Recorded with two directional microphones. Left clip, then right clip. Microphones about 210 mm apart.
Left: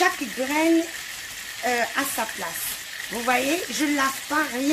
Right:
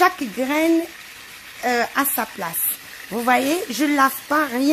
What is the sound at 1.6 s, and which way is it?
Speech, 50° right (ahead or behind).